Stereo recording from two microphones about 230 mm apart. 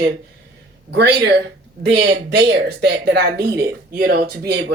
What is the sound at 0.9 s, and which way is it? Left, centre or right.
Speech, right.